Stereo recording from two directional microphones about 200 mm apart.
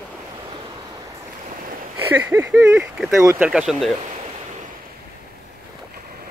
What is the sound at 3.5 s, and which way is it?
Speech, centre (ahead or behind).